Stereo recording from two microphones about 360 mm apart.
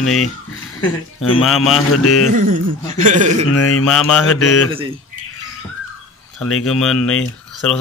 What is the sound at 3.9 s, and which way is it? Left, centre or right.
Speech, centre.